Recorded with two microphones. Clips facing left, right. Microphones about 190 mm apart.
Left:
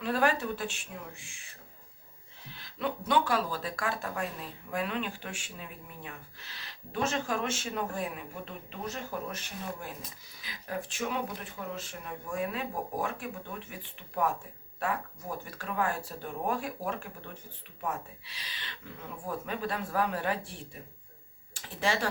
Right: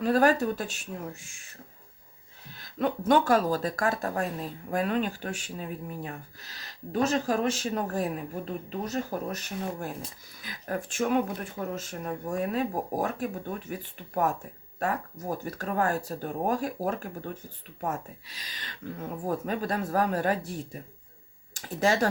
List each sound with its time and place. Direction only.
0.0 s speech: 40° right (ahead or behind)
2.5 s speech: 45° right (ahead or behind)